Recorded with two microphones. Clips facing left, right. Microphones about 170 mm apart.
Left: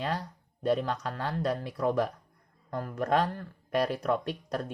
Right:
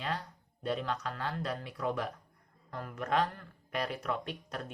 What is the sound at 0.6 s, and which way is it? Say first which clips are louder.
Speech: left 6 dB; 40° left (ahead or behind).